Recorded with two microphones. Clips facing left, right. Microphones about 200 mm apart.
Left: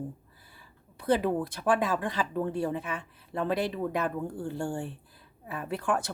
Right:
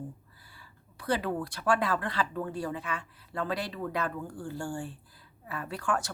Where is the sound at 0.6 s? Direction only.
20° left (ahead or behind).